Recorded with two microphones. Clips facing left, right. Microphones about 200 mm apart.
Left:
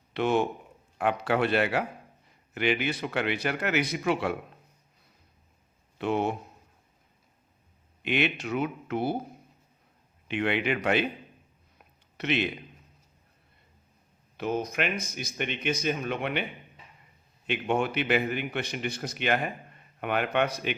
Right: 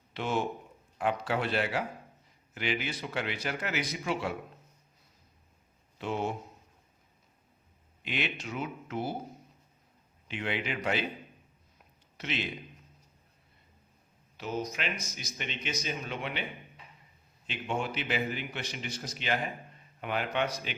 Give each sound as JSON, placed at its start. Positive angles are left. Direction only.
{"t": 0.1, "sound": "a man's voice", "side_deg": 65}
{"t": 6.0, "sound": "a man's voice", "side_deg": 65}
{"t": 8.0, "sound": "a man's voice", "side_deg": 65}
{"t": 10.2, "sound": "a man's voice", "side_deg": 60}
{"t": 12.1, "sound": "a man's voice", "side_deg": 65}
{"t": 14.3, "sound": "a man's voice", "side_deg": 55}
{"t": 17.4, "sound": "a man's voice", "side_deg": 60}